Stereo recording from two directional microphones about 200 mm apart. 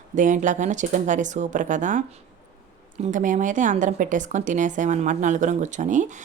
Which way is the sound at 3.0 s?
40° right (ahead or behind).